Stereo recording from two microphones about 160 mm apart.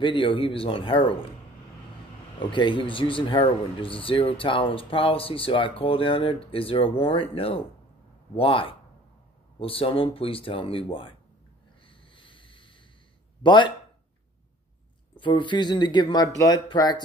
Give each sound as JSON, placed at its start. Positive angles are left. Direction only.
{"t": 0.0, "sound": "speech", "side_deg": 30}
{"t": 2.5, "sound": "speech", "side_deg": 30}
{"t": 12.1, "sound": "boat", "side_deg": 30}
{"t": 13.4, "sound": "speech", "side_deg": 30}
{"t": 15.1, "sound": "speech", "side_deg": 30}